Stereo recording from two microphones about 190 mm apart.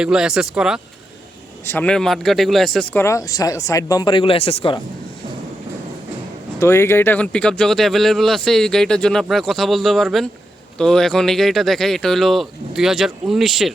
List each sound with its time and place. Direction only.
0.0 s speech: 5° right (ahead or behind)
1.6 s speech: 10° left (ahead or behind); by 4.8 s 30° left (ahead or behind)
6.6 s speech: 15° left (ahead or behind)